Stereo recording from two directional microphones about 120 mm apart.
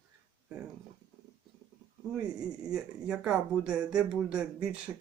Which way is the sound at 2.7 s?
5° right (ahead or behind).